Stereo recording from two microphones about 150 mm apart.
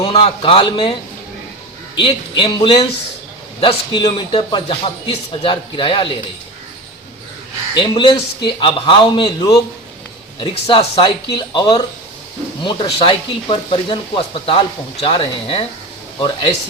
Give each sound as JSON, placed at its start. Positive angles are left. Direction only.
{"t": 0.0, "sound": "speech", "side_deg": 40}
{"t": 2.0, "sound": "speech", "side_deg": 35}
{"t": 7.7, "sound": "speech", "side_deg": 35}